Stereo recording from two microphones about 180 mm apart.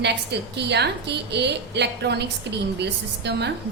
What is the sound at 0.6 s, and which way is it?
A woman's voice, 70° right (ahead or behind).